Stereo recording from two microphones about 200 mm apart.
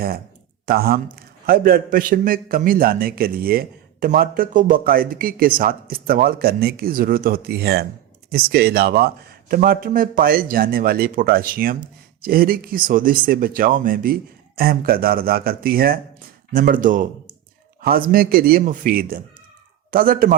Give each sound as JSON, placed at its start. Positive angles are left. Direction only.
{"t": 0.7, "sound": "speech", "side_deg": -50}